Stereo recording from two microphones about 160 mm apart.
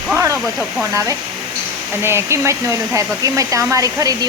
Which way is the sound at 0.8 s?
20° right (ahead or behind).